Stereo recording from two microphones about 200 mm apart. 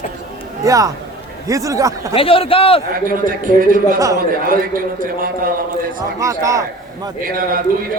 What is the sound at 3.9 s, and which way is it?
Speech, 15° right (ahead or behind).